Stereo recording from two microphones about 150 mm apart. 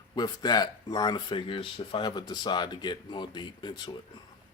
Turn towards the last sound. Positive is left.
turn(degrees=30)  # may be behind; listen again after turning